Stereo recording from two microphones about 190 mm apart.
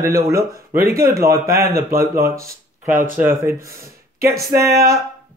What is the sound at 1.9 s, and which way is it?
Speech, 50° right (ahead or behind).